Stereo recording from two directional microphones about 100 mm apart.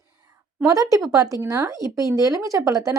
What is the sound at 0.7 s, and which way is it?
Speech, 35° right (ahead or behind).